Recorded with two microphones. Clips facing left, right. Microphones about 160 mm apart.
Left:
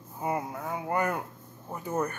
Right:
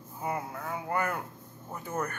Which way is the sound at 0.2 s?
25° left (ahead or behind).